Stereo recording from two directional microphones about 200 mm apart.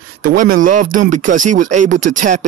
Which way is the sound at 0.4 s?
40° right (ahead or behind).